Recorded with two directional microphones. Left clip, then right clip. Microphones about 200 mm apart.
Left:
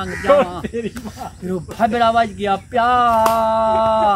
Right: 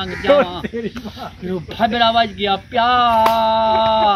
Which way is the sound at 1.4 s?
10° left (ahead or behind).